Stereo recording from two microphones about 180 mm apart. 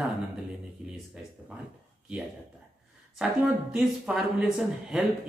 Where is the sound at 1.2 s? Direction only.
5° right (ahead or behind).